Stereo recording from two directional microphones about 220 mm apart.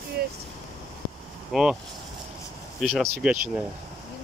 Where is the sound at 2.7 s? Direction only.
Centre (ahead or behind).